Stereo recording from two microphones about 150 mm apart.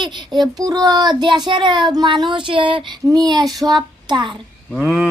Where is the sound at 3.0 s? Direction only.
25° right (ahead or behind).